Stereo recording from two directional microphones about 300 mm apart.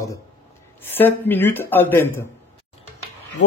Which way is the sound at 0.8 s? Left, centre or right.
Centre.